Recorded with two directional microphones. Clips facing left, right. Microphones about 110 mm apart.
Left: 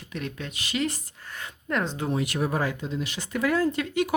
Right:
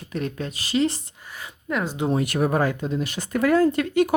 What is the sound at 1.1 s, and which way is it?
Speech, 10° right (ahead or behind).